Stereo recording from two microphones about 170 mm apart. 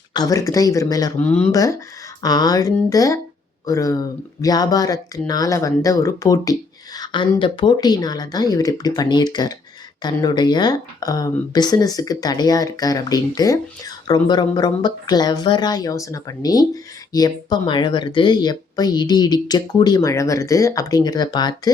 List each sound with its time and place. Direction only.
0.1 s speech: 20° left (ahead or behind)
1.2 s speech: 10° left (ahead or behind)